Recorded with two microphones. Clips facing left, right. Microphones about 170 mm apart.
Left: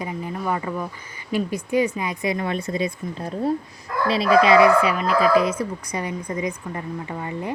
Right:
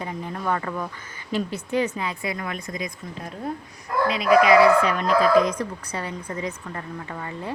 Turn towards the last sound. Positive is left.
turn(degrees=15)  # may be behind; listen again after turning